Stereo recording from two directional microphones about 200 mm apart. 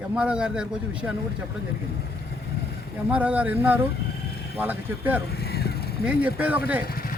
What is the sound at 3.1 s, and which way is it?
Speech, 5° right (ahead or behind).